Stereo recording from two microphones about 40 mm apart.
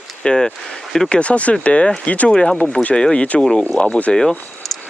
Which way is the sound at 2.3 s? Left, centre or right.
Left.